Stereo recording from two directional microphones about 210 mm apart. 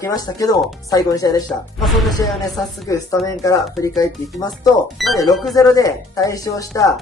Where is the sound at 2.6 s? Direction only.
15° left (ahead or behind).